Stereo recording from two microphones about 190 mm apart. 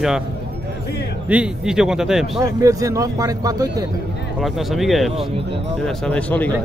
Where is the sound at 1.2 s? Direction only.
5° right (ahead or behind).